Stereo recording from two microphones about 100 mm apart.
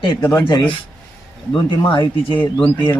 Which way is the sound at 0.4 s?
50° left (ahead or behind).